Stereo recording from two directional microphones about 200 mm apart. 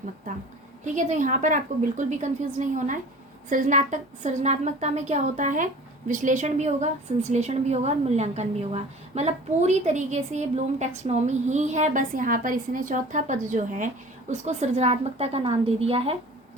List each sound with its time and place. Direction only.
0.3 s a woman's voice: 40° right (ahead or behind)